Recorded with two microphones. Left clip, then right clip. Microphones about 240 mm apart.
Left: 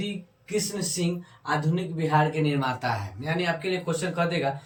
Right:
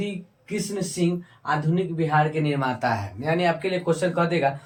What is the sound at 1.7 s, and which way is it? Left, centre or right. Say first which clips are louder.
Speech: right 3 dB; centre.